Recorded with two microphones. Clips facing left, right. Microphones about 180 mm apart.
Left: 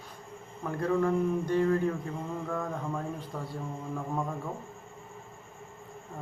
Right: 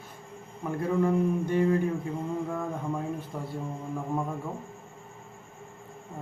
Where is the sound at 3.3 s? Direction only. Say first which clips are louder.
Right 2 dB; 15° right (ahead or behind).